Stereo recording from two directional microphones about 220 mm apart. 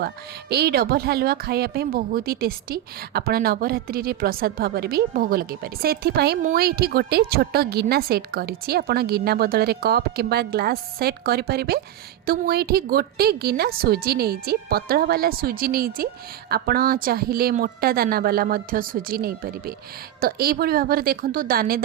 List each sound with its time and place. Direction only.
0.5 s speech: 45° right (ahead or behind)